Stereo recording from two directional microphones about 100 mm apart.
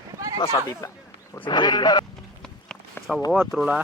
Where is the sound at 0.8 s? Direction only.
35° left (ahead or behind).